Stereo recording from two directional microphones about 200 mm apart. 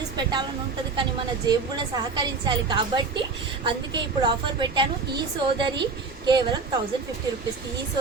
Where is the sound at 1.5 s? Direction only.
20° right (ahead or behind).